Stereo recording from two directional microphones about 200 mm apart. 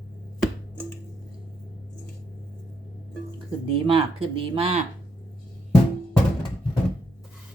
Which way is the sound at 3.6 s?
30° right (ahead or behind).